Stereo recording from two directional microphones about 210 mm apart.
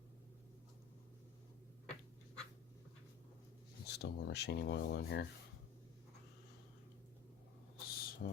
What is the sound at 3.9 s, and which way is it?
Speech, 55° left (ahead or behind).